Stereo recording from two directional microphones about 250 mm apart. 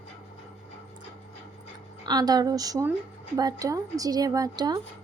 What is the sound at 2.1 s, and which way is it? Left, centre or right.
A woman's voice, centre.